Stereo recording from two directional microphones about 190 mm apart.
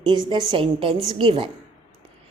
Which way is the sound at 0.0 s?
25° right (ahead or behind).